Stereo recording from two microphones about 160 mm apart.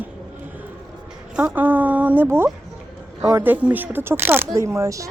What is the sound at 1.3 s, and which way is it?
Speech, 10° right (ahead or behind).